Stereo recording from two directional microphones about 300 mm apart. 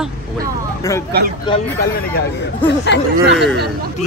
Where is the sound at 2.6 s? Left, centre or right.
Left.